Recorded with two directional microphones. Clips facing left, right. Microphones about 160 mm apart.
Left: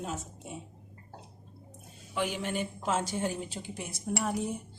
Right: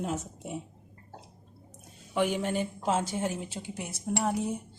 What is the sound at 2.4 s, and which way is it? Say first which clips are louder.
Speech: right 3 dB; 40° right (ahead or behind).